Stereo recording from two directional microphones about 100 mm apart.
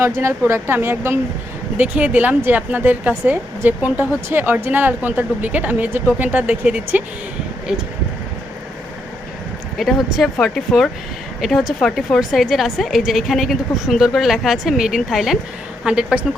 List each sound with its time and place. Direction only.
0.0 s speech: 25° right (ahead or behind)
9.7 s a woman's voice: centre (ahead or behind)